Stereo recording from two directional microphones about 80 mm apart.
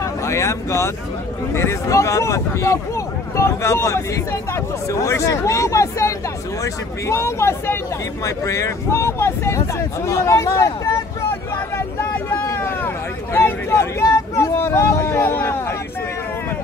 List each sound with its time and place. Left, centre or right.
0.0 s speech: left
12.3 s vehicle: left